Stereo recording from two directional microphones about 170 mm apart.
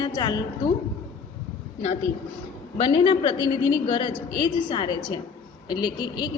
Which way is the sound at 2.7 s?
30° left (ahead or behind).